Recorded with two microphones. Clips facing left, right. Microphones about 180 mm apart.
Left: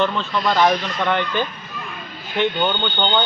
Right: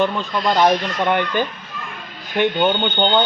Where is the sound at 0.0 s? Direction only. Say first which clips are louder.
Right 1 dB; 15° right (ahead or behind).